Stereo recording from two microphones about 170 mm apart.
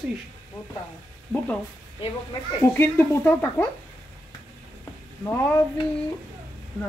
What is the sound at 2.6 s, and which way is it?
Speech, 15° left (ahead or behind).